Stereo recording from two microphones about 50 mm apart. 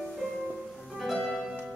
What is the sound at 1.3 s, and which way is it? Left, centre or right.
Music, centre.